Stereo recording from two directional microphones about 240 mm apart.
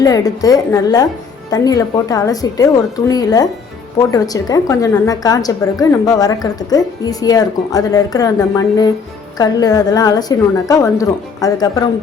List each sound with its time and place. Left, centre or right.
0.0 s a woman's voice: centre